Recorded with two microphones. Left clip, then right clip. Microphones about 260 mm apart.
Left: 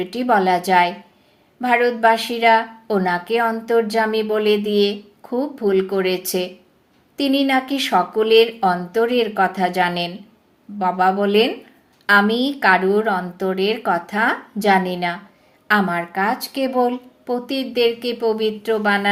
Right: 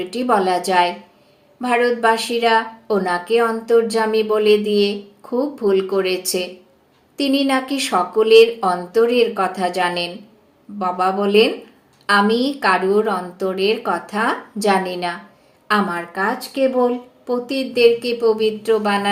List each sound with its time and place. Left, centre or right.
0.0 s a woman's voice: left